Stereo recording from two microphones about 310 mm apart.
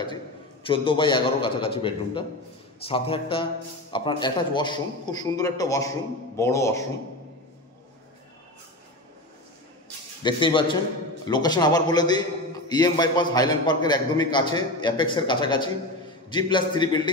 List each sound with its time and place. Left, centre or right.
0.7 s a man's voice: centre
10.2 s a man's voice: centre